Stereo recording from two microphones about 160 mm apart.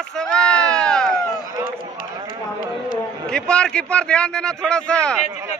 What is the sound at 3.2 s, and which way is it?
A man's voice, 5° left (ahead or behind).